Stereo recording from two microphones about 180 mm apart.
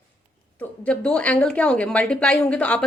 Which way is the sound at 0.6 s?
5° left (ahead or behind).